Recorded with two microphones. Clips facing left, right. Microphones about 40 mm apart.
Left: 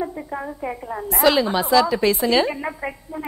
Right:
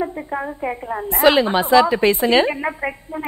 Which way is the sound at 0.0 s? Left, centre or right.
Right.